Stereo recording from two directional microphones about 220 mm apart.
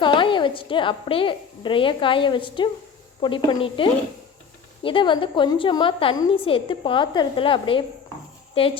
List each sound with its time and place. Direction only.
0.0 s a woman's voice: 20° left (ahead or behind)